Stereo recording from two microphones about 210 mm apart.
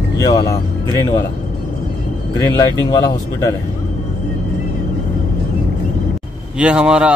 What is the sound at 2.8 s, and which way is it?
Speech, 15° left (ahead or behind).